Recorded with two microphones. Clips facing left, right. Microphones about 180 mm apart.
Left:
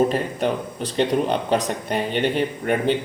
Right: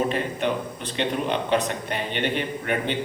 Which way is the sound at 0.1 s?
40° left (ahead or behind).